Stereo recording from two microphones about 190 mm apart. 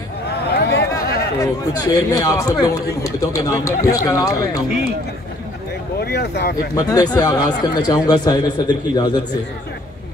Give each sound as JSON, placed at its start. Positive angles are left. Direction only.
{"t": 0.5, "sound": "a sound", "side_deg": 60}
{"t": 1.4, "sound": "a man's voice", "side_deg": 15}
{"t": 5.9, "sound": "speech", "side_deg": 60}
{"t": 6.7, "sound": "speech", "side_deg": 20}